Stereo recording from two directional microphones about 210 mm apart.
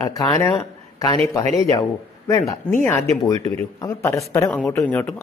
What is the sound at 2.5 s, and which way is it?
Speech, 10° left (ahead or behind).